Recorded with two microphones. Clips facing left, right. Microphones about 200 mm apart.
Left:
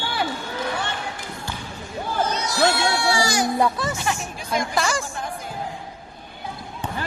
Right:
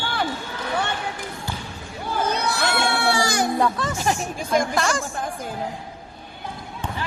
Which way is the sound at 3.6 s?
10° left (ahead or behind).